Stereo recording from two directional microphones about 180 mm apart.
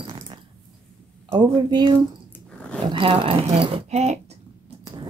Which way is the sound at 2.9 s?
30° right (ahead or behind).